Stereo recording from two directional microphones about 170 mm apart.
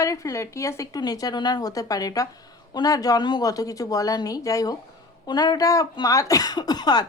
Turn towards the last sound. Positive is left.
turn(degrees=25)  # may be behind; listen again after turning